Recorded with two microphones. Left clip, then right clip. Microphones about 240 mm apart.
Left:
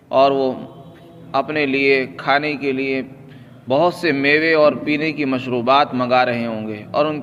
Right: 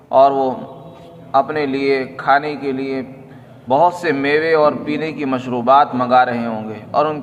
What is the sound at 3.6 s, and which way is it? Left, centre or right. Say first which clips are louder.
A man's voice: right 2 dB; left.